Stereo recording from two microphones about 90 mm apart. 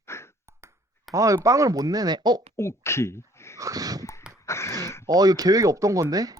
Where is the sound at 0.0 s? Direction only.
30° left (ahead or behind).